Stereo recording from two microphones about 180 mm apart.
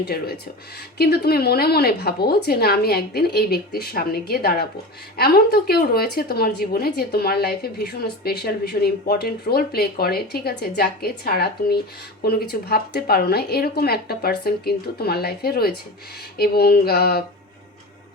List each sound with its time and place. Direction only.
0.0 s a woman's voice: 60° left (ahead or behind)